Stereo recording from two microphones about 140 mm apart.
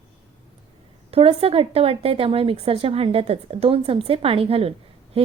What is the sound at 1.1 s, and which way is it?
A woman's voice, 45° right (ahead or behind).